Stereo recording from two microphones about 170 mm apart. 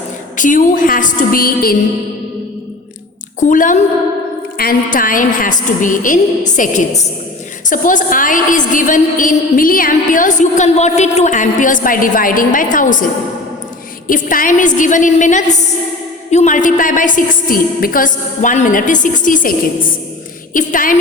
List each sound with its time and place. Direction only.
0.3 s a woman's voice: 50° left (ahead or behind)
3.4 s a woman's voice: 50° left (ahead or behind)
14.1 s a woman's voice: 50° left (ahead or behind)